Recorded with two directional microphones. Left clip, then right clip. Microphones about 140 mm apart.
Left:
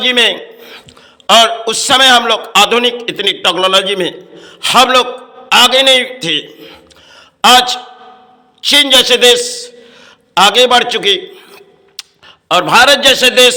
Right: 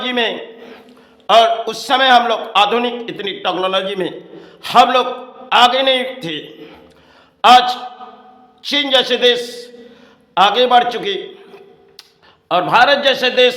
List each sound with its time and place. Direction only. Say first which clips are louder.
0.0 s a sound: left 8 dB; 15° left (ahead or behind)
1.3 s a man's voice: left 3 dB; 15° left (ahead or behind)
6.5 s a man's voice: left 3 dB; 5° left (ahead or behind)
7.4 s a man's voice: left 2 dB; 15° left (ahead or behind)
10.3 s a sound: left 4 dB; 15° left (ahead or behind)
12.5 s a man's voice: left 4 dB; 15° left (ahead or behind)